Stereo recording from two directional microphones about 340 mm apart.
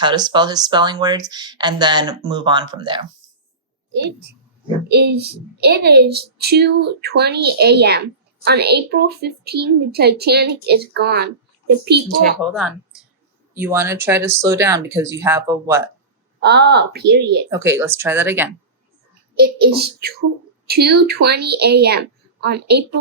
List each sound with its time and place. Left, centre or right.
0.0 s speech: centre
4.9 s a child's voice: right
12.4 s speech: centre
16.4 s a child's voice: right
17.5 s speech: centre
19.4 s a child's voice: right